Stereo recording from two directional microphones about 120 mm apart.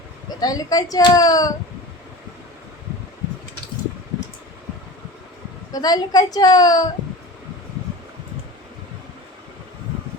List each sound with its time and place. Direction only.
0.3 s speech: 30° left (ahead or behind)
5.7 s speech: 35° left (ahead or behind)